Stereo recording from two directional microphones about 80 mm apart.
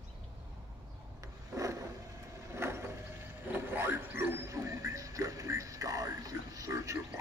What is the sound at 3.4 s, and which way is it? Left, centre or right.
Music, right.